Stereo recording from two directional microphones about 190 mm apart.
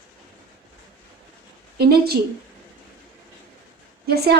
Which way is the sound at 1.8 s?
55° right (ahead or behind).